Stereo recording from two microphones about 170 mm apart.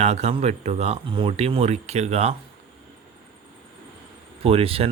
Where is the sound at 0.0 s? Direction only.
40° right (ahead or behind).